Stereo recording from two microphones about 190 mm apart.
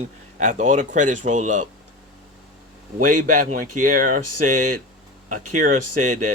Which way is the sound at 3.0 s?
45° right (ahead or behind).